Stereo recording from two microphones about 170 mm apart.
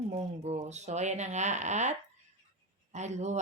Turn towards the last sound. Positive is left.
turn(degrees=-40)  # may be behind; listen again after turning